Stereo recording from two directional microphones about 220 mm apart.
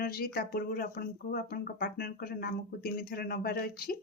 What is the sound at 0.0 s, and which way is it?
Speech, 45° left (ahead or behind).